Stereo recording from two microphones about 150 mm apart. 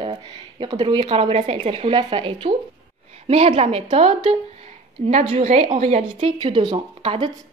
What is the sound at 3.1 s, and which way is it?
Speech, 45° right (ahead or behind).